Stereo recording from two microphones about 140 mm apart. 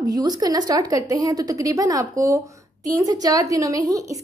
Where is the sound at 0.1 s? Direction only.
30° right (ahead or behind).